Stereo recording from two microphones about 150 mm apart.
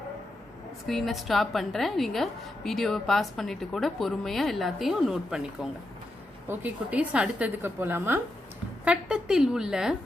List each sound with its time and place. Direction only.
0.9 s a woman's voice: centre (ahead or behind)
6.5 s a woman's voice: 10° right (ahead or behind)